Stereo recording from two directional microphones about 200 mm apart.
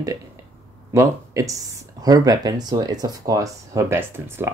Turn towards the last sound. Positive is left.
turn(degrees=-10)  # may be behind; listen again after turning